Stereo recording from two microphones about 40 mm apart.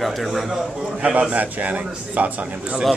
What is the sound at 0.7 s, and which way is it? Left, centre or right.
Speech, centre.